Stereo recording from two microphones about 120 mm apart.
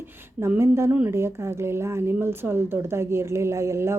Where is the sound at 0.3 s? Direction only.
20° right (ahead or behind).